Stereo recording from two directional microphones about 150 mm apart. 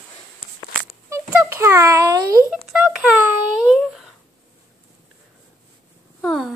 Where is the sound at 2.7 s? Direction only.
5° right (ahead or behind).